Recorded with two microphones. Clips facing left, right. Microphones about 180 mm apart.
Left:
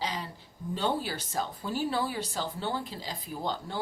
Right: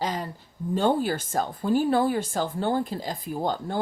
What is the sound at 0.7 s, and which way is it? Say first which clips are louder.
Speech: right 7 dB; 50° right (ahead or behind).